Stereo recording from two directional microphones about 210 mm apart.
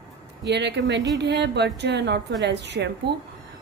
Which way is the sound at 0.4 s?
55° right (ahead or behind).